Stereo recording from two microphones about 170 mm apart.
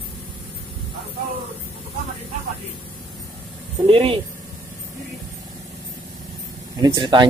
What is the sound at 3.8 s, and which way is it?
Speech, 30° right (ahead or behind).